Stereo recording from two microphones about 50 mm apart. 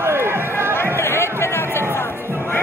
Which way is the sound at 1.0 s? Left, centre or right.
Left.